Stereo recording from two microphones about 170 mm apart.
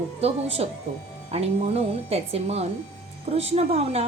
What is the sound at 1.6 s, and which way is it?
A woman's voice, 35° right (ahead or behind).